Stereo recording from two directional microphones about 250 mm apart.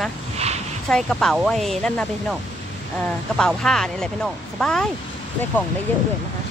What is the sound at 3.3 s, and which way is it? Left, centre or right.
Speech, centre.